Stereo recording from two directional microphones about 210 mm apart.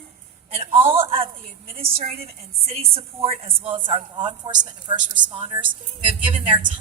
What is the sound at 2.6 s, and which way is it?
A woman's voice, 30° right (ahead or behind).